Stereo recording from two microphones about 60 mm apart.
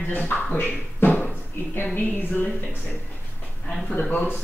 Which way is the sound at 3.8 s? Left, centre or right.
Left.